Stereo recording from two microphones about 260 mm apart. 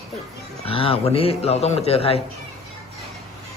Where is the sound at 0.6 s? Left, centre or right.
Left.